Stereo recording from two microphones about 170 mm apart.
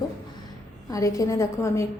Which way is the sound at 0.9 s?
20° left (ahead or behind).